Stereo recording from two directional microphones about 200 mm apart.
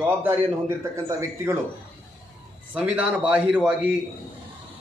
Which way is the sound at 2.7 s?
5° right (ahead or behind).